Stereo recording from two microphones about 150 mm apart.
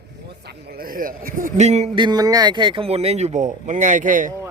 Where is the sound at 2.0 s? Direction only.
25° right (ahead or behind); by 4.3 s 60° right (ahead or behind).